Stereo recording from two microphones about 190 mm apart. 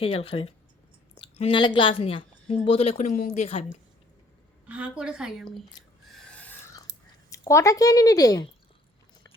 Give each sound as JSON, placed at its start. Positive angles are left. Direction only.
{"t": 0.0, "sound": "a woman's voice", "side_deg": 30}
{"t": 4.7, "sound": "a woman's voice", "side_deg": -5}
{"t": 6.1, "sound": "a sound", "side_deg": 5}
{"t": 7.3, "sound": "speech", "side_deg": 15}